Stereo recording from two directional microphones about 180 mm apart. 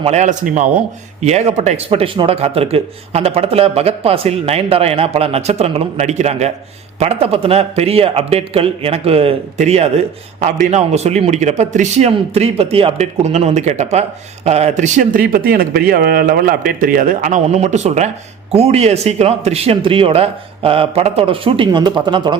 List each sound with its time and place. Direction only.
0.0 s speech: 40° right (ahead or behind)